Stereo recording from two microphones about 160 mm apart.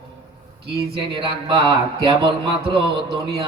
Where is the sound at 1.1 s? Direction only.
30° right (ahead or behind).